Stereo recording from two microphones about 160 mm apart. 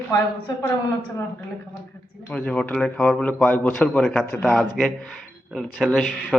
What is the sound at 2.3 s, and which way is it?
A man's voice, 5° left (ahead or behind).